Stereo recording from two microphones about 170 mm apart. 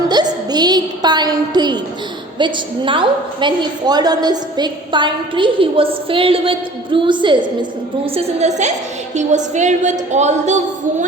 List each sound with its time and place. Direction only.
0.1 s music: 25° right (ahead or behind)
2.4 s a woman's voice: 30° right (ahead or behind)